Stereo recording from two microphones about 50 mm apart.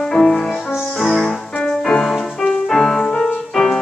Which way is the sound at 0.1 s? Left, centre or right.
Centre.